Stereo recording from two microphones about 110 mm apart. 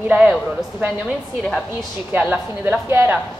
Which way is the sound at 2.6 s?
20° right (ahead or behind).